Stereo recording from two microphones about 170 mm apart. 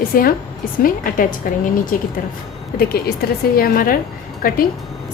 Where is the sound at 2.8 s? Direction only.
65° left (ahead or behind).